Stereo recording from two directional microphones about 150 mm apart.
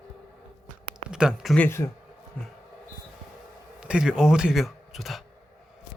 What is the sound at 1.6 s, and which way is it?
Speech, 15° left (ahead or behind).